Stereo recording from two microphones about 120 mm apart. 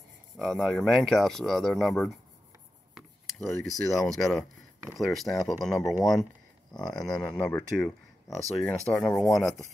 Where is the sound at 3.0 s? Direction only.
Centre (ahead or behind).